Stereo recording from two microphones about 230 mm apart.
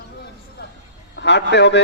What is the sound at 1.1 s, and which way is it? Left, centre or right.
Speech, left.